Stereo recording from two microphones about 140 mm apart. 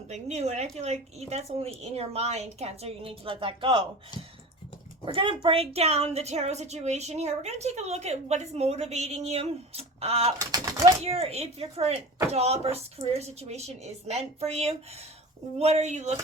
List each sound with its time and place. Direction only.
0.1 s a woman's voice: 55° right (ahead or behind); by 3.8 s 35° right (ahead or behind)
5.0 s a woman's voice: 40° right (ahead or behind)
10.3 s speech: 25° right (ahead or behind)
11.0 s a woman's voice: 45° right (ahead or behind)